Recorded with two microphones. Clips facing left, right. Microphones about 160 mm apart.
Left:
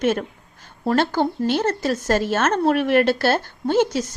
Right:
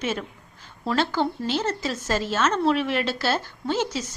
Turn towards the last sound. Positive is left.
turn(degrees=55)  # may be behind; listen again after turning